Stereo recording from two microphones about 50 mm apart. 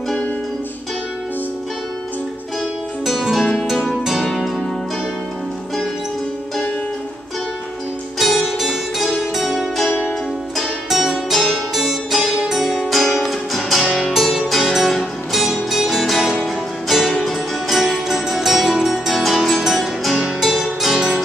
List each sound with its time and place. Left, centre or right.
3.1 s music: centre
8.2 s music: centre
9.4 s zither: centre
11.7 s music: centre
12.1 s music: centre